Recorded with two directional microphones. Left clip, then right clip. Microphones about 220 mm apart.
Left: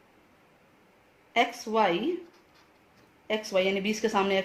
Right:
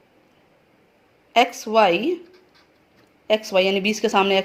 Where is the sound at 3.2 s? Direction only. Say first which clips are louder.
Right 8 dB; 25° right (ahead or behind).